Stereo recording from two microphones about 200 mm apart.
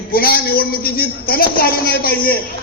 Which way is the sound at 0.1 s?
50° left (ahead or behind).